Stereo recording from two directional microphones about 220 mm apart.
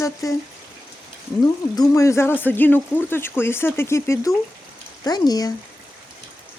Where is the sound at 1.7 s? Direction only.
15° left (ahead or behind).